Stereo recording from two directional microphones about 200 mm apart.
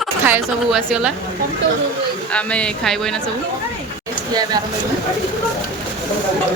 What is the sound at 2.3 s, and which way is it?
Speech, 5° left (ahead or behind).